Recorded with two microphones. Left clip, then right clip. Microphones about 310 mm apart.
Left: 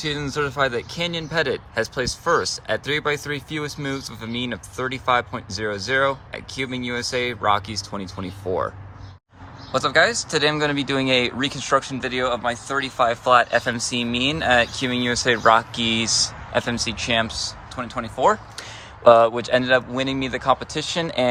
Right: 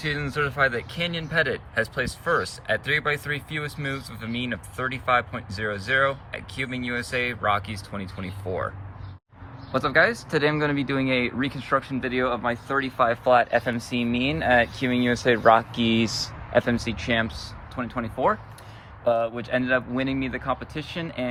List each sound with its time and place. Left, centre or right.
0.0 s speech: centre
9.7 s speech: centre
19.0 s speech: centre